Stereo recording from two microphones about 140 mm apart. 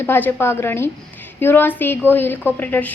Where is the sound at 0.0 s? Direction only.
15° left (ahead or behind).